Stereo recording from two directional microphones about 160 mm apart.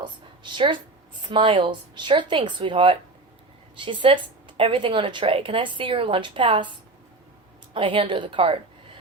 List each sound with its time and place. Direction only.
0.0 s a woman's voice: 30° right (ahead or behind)